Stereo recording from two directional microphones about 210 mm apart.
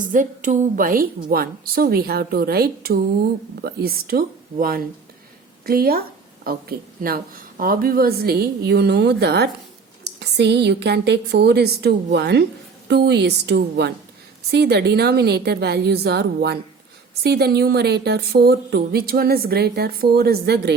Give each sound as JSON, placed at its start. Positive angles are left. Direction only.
{"t": 0.1, "sound": "speech", "side_deg": -40}